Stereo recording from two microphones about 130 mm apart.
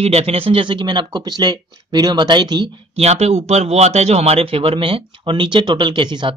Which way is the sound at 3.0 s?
55° right (ahead or behind).